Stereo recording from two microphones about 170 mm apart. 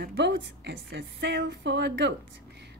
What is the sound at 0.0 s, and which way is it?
A woman's voice, 80° right.